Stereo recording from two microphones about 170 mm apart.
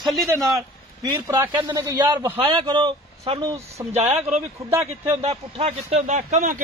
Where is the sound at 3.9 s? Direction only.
40° right (ahead or behind).